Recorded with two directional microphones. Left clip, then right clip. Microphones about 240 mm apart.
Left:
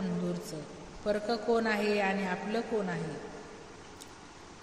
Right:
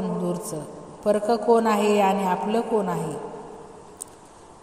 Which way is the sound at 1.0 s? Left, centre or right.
Right.